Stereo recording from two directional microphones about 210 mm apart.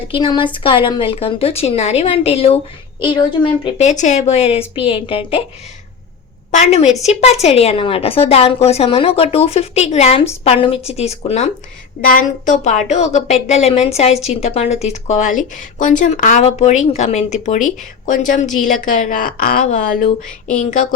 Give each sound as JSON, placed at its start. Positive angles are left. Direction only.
{"t": 0.1, "sound": "a woman's voice", "side_deg": 25}
{"t": 6.5, "sound": "a woman's voice", "side_deg": 35}